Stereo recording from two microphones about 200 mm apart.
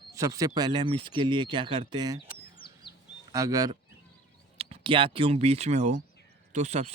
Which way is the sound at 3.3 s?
15° right (ahead or behind).